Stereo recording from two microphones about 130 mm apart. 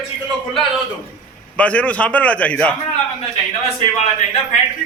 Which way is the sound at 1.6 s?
10° left (ahead or behind).